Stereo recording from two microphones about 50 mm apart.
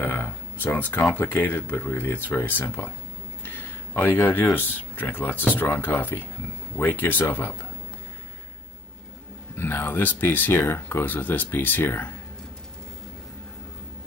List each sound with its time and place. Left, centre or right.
0.7 s speech: left
2.0 s speech: left
3.4 s a sound: left
4.6 s speech: left
9.6 s speech: left